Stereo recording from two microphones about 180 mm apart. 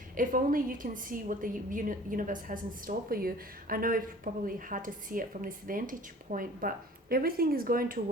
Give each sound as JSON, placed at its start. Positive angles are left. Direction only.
{"t": 0.2, "sound": "a woman's voice", "side_deg": -50}